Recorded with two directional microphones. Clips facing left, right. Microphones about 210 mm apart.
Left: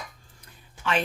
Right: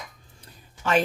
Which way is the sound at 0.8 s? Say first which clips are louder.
Right 4 dB; 45° right (ahead or behind).